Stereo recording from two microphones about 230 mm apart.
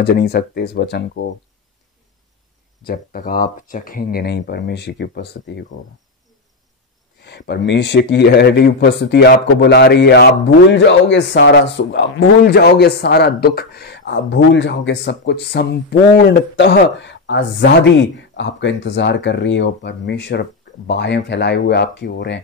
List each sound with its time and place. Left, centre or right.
0.0 s speech: left
2.8 s speech: left
7.2 s speech: left